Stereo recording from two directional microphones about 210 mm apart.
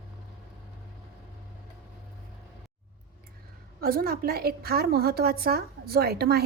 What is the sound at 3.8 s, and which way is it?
A woman's voice, 45° right (ahead or behind).